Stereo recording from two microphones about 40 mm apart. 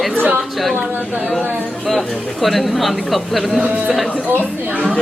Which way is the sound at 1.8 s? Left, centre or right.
Centre.